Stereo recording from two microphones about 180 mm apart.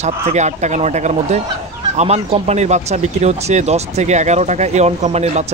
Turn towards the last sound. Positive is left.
turn(degrees=-35)  # may be behind; listen again after turning